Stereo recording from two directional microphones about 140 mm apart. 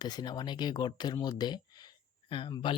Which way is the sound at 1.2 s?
30° left (ahead or behind).